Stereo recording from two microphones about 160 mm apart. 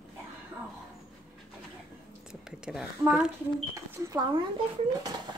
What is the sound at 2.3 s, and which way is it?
A woman's voice, 5° right (ahead or behind).